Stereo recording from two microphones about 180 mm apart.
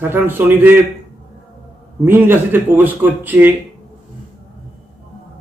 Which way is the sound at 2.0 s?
10° right (ahead or behind).